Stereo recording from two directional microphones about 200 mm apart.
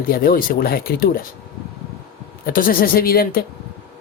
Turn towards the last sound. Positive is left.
turn(degrees=45)  # may be behind; listen again after turning